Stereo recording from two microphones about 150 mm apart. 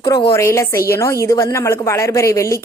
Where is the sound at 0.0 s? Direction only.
35° left (ahead or behind).